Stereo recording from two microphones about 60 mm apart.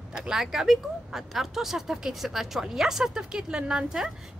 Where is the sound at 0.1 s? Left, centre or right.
Centre.